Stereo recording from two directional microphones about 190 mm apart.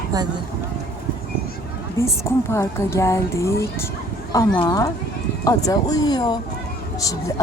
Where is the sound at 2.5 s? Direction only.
15° left (ahead or behind).